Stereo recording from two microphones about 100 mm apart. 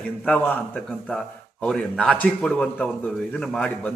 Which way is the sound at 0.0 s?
15° left (ahead or behind).